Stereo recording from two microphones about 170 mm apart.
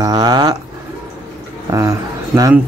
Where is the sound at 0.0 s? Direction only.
25° right (ahead or behind).